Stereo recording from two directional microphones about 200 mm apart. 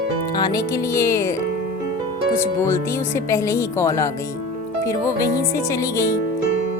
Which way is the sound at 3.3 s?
15° left (ahead or behind).